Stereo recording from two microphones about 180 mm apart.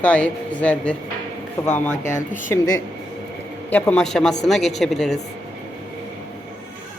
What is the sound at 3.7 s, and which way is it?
A woman's voice, 10° left (ahead or behind).